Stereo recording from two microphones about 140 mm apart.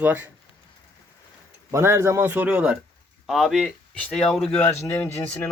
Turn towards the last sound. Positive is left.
turn(degrees=15)  # may be behind; listen again after turning